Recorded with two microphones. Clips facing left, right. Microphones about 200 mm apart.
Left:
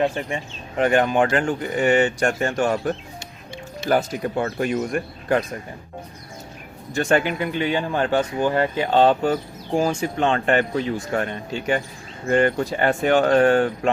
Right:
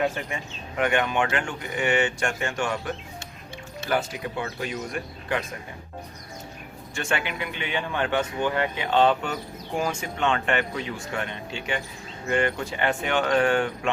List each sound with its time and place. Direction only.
0.0 s speech: 30° left (ahead or behind); by 5.4 s 50° left (ahead or behind)
6.9 s speech: 40° left (ahead or behind)